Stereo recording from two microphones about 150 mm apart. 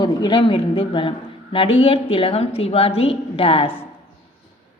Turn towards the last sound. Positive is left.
turn(degrees=40)  # may be behind; listen again after turning